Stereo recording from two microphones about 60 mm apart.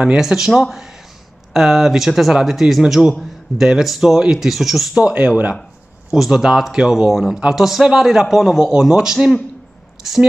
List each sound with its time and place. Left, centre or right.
0.0 s a man's voice: centre
4.9 s speech: centre
6.0 s a man's voice: centre